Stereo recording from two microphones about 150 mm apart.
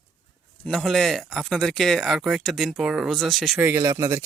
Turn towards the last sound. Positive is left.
turn(degrees=-20)  # may be behind; listen again after turning